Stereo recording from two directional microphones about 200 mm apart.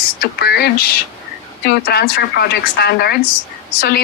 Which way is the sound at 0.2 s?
55° left (ahead or behind).